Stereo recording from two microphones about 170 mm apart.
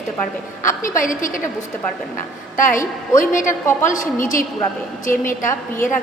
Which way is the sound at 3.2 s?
50° left (ahead or behind).